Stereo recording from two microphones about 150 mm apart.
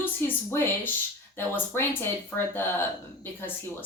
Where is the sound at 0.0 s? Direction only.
15° left (ahead or behind).